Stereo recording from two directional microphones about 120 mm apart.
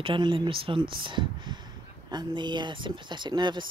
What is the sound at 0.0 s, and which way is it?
A woman's voice, 45° right (ahead or behind).